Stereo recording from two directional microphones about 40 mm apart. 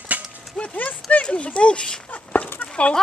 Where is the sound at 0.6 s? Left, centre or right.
Centre.